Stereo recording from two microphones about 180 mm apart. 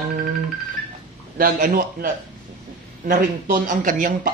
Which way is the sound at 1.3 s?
55° right (ahead or behind).